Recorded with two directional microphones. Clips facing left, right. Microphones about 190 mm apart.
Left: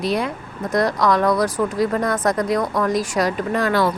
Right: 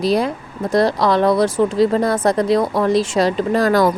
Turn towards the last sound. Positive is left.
turn(degrees=-40)  # may be behind; listen again after turning